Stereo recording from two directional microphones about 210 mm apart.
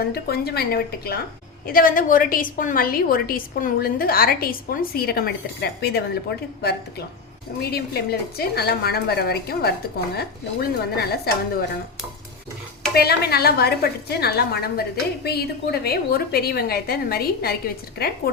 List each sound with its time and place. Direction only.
0.0 s a woman's voice: 50° left (ahead or behind)
7.6 s a woman's voice: 50° left (ahead or behind)
12.9 s a woman's voice: 50° left (ahead or behind)